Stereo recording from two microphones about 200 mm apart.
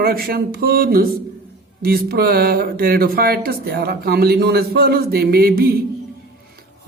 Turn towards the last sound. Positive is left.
turn(degrees=-50)  # may be behind; listen again after turning